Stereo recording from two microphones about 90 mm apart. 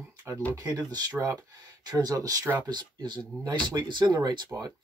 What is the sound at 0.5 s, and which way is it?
Speech, 45° right (ahead or behind).